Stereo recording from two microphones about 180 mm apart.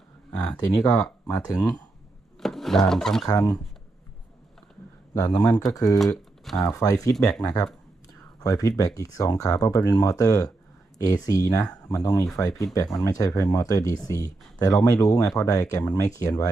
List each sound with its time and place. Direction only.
0.8 s speech: 5° left (ahead or behind)
2.4 s speech: centre (ahead or behind)
3.2 s speech: 20° left (ahead or behind)
5.1 s speech: 15° left (ahead or behind)
6.0 s speech: centre (ahead or behind)
6.7 s speech: 20° left (ahead or behind)
7.2 s speech: 5° left (ahead or behind)
7.4 s speech: 20° left (ahead or behind)